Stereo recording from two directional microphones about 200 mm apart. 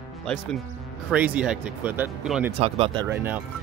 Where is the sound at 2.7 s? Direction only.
30° right (ahead or behind).